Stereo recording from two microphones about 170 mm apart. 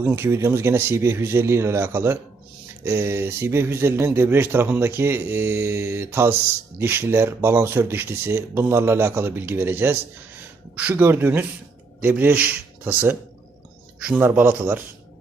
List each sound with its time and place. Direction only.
0.0 s a man's voice: 15° right (ahead or behind)